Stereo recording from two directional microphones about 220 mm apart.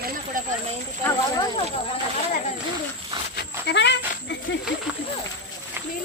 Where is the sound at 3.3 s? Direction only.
50° left (ahead or behind).